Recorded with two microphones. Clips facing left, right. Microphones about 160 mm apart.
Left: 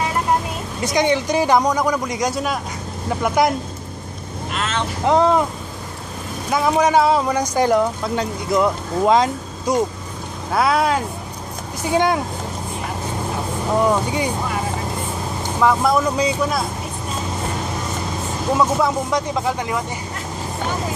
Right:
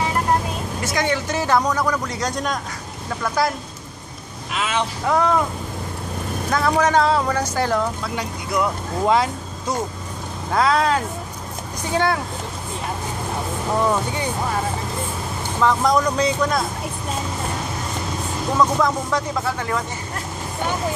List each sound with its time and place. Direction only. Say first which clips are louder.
0.8 s a man's voice: left 5 dB; 20° left (ahead or behind)
3.2 s speech: left 4 dB; 20° left (ahead or behind)
4.6 s vehicle: right 1 dB; 10° right (ahead or behind)
5.0 s speech: left 4 dB; 25° left (ahead or behind)
6.5 s a man's voice: left 2 dB; 10° left (ahead or behind)
13.8 s a man's voice: left 3 dB; 15° left (ahead or behind)
15.6 s a man's voice: left 1 dB; 5° left (ahead or behind)
18.5 s a man's voice: left 1 dB; 10° left (ahead or behind)